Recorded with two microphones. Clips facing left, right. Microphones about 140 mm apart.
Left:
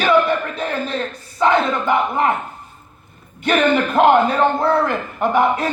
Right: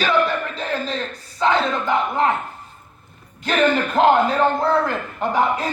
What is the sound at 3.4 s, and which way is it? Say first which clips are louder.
A man's voice: left 2 dB; 65° left (ahead or behind).